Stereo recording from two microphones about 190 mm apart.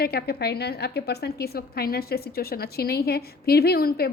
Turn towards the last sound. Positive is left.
turn(degrees=55)  # may be behind; listen again after turning